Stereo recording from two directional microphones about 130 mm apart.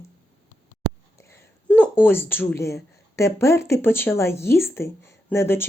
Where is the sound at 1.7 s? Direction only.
15° left (ahead or behind).